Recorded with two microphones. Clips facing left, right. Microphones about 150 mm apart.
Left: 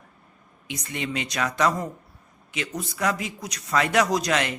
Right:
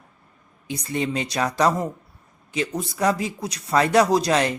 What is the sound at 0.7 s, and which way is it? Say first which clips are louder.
Speech: right 5 dB; 35° right (ahead or behind).